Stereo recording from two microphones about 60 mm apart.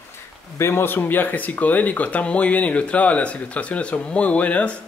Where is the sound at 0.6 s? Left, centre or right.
Left.